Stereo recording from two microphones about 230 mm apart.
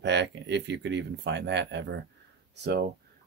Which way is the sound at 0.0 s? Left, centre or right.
Right.